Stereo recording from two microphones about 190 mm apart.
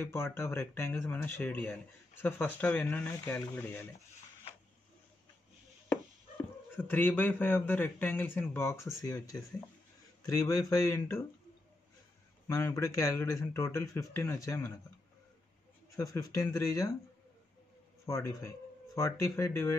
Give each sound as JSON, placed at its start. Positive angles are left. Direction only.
{"t": 0.0, "sound": "speech", "side_deg": 15}
{"t": 6.8, "sound": "speech", "side_deg": 10}
{"t": 12.4, "sound": "speech", "side_deg": 15}
{"t": 16.0, "sound": "speech", "side_deg": 20}
{"t": 18.0, "sound": "speech", "side_deg": 15}